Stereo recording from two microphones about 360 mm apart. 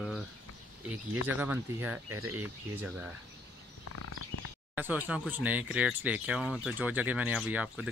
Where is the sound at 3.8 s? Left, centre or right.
Left.